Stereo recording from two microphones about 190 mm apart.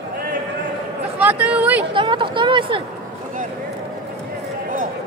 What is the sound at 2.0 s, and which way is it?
Speech, 25° right (ahead or behind).